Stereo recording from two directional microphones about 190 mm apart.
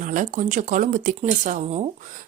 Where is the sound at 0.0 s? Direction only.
45° right (ahead or behind).